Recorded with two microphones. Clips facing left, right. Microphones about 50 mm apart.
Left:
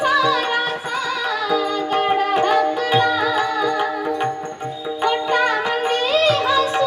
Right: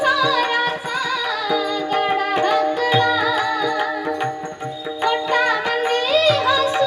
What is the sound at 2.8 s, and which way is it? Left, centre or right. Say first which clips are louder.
Music: even; centre.